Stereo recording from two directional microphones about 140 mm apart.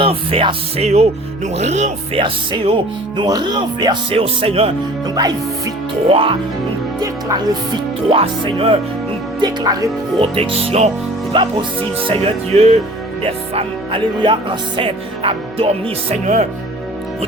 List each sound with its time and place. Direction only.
0.0 s music: 40° right (ahead or behind)
1.5 s speech: 55° right (ahead or behind)
2.2 s speech: 35° right (ahead or behind)
5.0 s speech: 30° right (ahead or behind)
6.1 s speech: 40° right (ahead or behind)
7.0 s speech: 25° right (ahead or behind)
9.4 s speech: 30° right (ahead or behind)
10.2 s music: 40° right (ahead or behind)
11.3 s speech: 35° right (ahead or behind)
12.0 s music: 40° right (ahead or behind)
13.2 s speech: 45° right (ahead or behind)
16.2 s speech: 60° right (ahead or behind)